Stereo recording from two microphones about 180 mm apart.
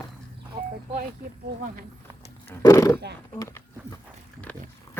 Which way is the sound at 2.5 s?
15° left (ahead or behind).